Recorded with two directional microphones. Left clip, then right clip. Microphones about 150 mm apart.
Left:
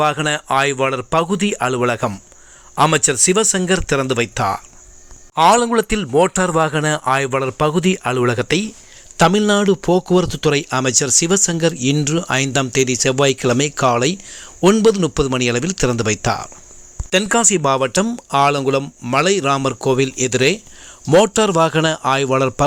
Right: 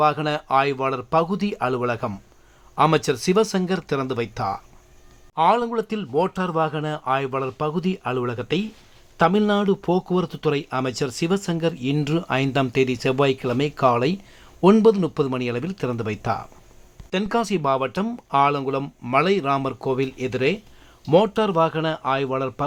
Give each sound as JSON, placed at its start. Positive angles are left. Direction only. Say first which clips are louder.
{"t": 0.0, "sound": "speech", "louder": "left 3 dB", "side_deg": 15}
{"t": 1.5, "sound": "speech", "louder": "left 4 dB", "side_deg": 20}
{"t": 5.3, "sound": "a man's voice", "louder": "left 7 dB", "side_deg": 30}